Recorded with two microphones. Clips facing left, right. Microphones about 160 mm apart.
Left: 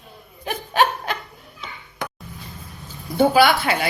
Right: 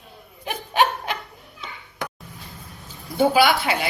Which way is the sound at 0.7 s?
15° right (ahead or behind).